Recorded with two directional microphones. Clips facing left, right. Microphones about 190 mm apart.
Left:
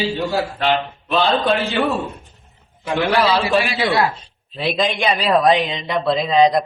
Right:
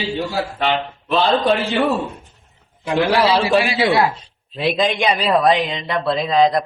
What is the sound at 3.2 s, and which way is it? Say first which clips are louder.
Speech: even; 15° right (ahead or behind).